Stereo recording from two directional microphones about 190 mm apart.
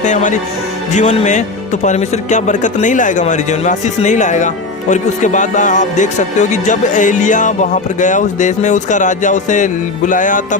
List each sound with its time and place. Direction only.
0.0 s speech: 40° left (ahead or behind)